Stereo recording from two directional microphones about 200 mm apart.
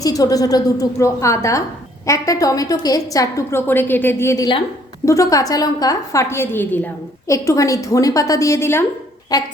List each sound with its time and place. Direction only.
0.0 s a woman's voice: 20° left (ahead or behind)